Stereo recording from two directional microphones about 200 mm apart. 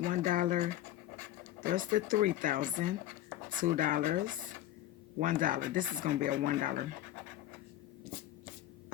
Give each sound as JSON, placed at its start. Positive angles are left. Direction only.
{"t": 0.0, "sound": "speech", "side_deg": -40}